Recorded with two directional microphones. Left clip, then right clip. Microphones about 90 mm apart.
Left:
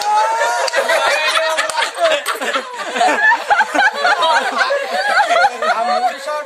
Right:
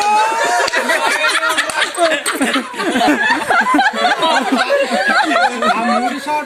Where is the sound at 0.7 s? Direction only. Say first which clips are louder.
Even; centre (ahead or behind); by 2.1 s 20° left (ahead or behind).